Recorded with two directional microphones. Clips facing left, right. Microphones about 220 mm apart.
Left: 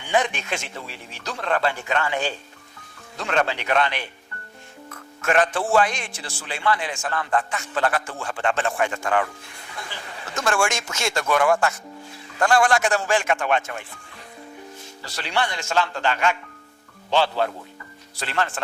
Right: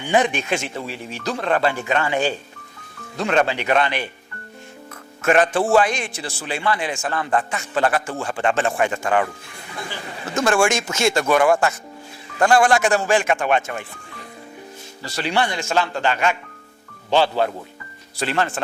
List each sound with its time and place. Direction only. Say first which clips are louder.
0.0 s speech: right 4 dB; 10° right (ahead or behind)
5.2 s speech: right 4 dB; 15° right (ahead or behind)
9.7 s a sound: right 5 dB; 10° right (ahead or behind)
10.6 s speech: right 6 dB; 10° right (ahead or behind)
13.2 s speech: right 3 dB; 20° right (ahead or behind)
15.1 s speech: right 4 dB; 10° right (ahead or behind)